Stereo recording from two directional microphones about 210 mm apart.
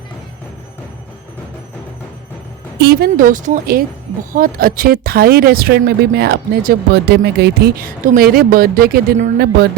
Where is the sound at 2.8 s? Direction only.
45° right (ahead or behind).